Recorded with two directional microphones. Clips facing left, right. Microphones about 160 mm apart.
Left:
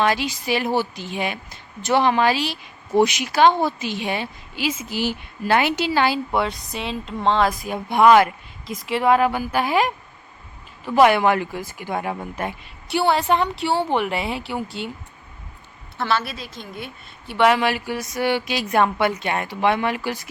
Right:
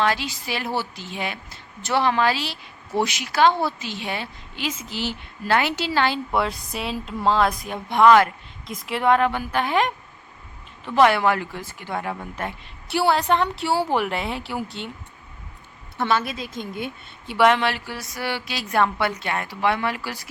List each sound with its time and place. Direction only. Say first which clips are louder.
0.0 s a woman's voice: left 2 dB; 15° left (ahead or behind)
6.3 s speech: left 1 dB; centre (ahead or behind)
8.6 s a woman's voice: left 2 dB; centre (ahead or behind)
12.9 s speech: left 1 dB; centre (ahead or behind)
16.0 s a woman's voice: right 1 dB; 15° right (ahead or behind)
17.4 s speech: left 1 dB; 10° left (ahead or behind)